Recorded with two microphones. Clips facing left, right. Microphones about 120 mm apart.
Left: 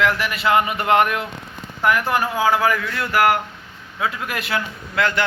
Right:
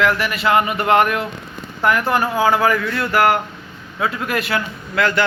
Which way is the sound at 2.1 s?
40° right (ahead or behind).